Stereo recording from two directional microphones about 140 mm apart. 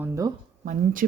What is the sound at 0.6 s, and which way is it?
Speech, 75° right (ahead or behind).